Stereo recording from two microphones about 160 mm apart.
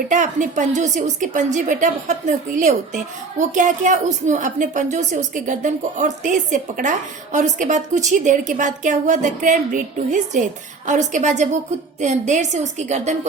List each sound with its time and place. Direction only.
0.1 s a woman's voice: 50° right (ahead or behind)